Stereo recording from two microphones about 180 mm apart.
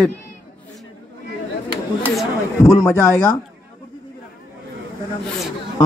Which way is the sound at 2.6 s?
15° left (ahead or behind).